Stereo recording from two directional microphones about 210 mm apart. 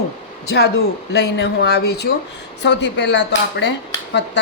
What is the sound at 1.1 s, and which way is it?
Speech, 55° left (ahead or behind).